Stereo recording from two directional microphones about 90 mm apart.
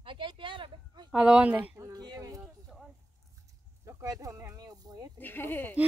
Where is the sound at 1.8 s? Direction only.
45° right (ahead or behind).